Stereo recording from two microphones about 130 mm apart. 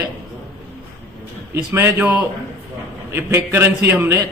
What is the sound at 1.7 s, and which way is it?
A man's voice, 20° right (ahead or behind).